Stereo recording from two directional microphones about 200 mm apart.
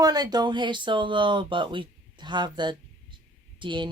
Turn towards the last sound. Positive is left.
turn(degrees=-25)  # may be behind; listen again after turning